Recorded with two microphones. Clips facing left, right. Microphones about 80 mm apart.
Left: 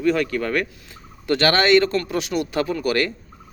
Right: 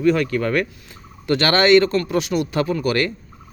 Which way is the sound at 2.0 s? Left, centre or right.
Right.